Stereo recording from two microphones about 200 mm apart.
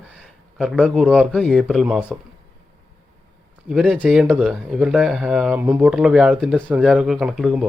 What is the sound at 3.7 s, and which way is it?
Speech, 5° right (ahead or behind).